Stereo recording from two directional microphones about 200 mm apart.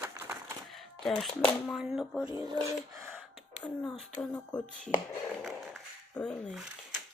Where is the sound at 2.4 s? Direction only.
20° right (ahead or behind).